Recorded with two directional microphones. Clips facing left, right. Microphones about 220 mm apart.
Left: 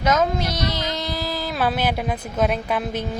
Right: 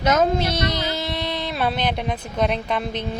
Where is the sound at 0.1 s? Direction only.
30° right (ahead or behind).